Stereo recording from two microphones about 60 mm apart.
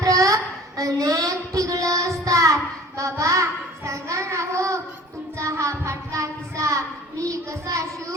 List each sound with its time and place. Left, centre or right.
0.0 s child singing: right
3.0 s a child's voice: right
3.8 s child singing: right